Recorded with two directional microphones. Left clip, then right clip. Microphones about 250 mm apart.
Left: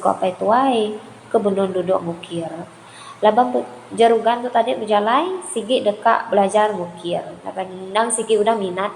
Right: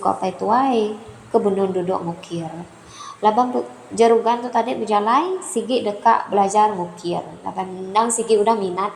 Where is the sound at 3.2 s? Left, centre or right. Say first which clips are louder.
Left 2 dB; centre.